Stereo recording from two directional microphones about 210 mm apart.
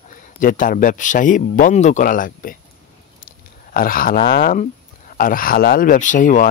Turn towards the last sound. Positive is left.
turn(degrees=35)  # may be behind; listen again after turning